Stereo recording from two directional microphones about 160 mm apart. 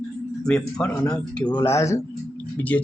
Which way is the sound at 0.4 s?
5° left (ahead or behind).